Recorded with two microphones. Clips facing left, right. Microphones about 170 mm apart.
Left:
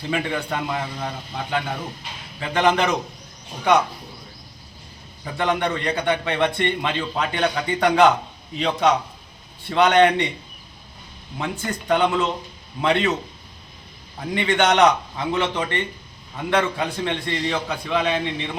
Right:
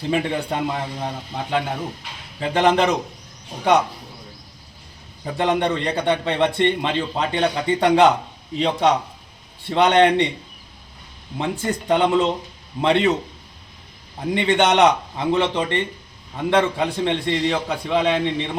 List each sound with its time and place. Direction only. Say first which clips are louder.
0.1 s a man's voice: right 3 dB; 30° right (ahead or behind)
5.2 s a man's voice: right 2 dB; 30° right (ahead or behind)
11.3 s a man's voice: right 4 dB; 25° right (ahead or behind)
14.2 s a man's voice: right 2 dB; 25° right (ahead or behind)